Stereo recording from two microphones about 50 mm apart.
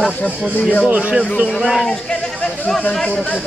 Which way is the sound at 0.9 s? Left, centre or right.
Right.